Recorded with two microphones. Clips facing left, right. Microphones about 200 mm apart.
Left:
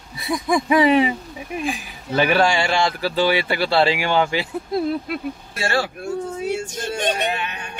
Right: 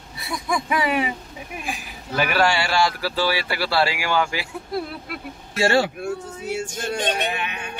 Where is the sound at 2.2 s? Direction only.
25° left (ahead or behind).